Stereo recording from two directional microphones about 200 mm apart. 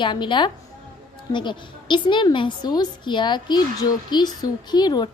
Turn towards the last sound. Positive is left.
turn(degrees=20)  # may be behind; listen again after turning